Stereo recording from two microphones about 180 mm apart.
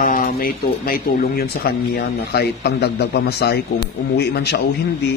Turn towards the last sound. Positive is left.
turn(degrees=65)  # may be behind; listen again after turning